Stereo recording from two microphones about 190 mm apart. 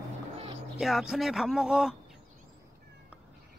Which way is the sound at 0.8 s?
Centre (ahead or behind).